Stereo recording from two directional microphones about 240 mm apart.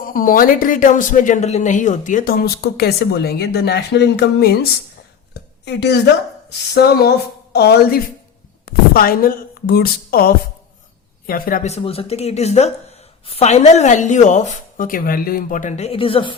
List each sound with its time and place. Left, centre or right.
0.0 s speech: left
5.3 s a sound: left
6.7 s speech: left